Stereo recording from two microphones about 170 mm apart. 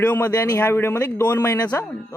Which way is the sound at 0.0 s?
10° left (ahead or behind).